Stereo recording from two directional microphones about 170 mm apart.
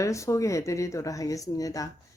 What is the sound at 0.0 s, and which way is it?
A woman's voice, 20° left (ahead or behind).